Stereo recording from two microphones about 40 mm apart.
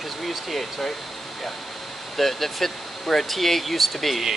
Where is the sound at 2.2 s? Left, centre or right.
Centre.